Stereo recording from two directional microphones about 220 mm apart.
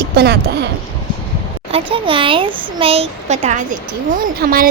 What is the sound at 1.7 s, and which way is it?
A child's voice, 25° right (ahead or behind).